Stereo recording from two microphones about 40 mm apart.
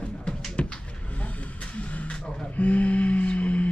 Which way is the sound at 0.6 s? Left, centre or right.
Left.